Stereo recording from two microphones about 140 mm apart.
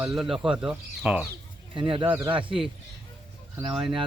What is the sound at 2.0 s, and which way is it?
Speech, 20° right (ahead or behind).